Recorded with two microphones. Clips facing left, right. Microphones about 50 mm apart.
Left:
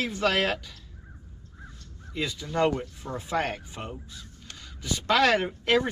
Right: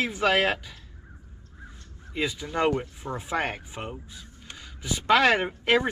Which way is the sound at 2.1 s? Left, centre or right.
Centre.